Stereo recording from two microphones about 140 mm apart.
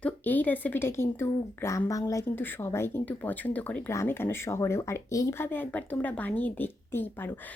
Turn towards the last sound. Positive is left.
turn(degrees=15)  # may be behind; listen again after turning